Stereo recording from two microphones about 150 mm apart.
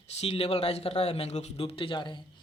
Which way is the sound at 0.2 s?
40° left (ahead or behind).